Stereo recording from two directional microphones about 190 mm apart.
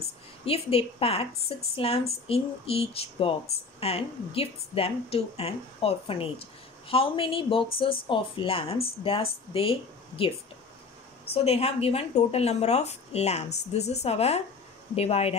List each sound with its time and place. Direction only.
0.5 s speech: 30° left (ahead or behind)
11.3 s speech: 30° left (ahead or behind)